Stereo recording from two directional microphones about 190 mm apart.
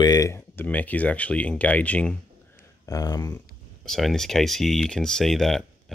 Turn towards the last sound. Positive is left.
turn(degrees=0)  # may be behind; listen again after turning